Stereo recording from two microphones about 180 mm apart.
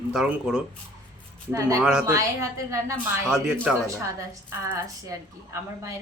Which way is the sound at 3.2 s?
5° right (ahead or behind).